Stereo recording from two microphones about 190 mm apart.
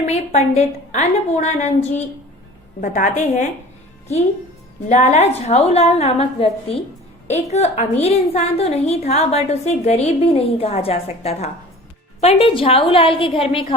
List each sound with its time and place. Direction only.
0.0 s a woman's voice: 35° left (ahead or behind)
4.9 s a woman's voice: 35° left (ahead or behind)